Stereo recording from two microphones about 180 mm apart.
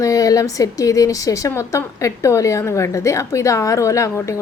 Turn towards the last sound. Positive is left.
turn(degrees=15)  # may be behind; listen again after turning